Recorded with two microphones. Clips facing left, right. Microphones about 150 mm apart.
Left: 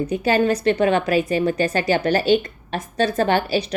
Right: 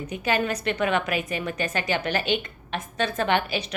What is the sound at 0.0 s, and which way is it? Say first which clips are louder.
A woman's voice: left 7 dB; 35° left (ahead or behind).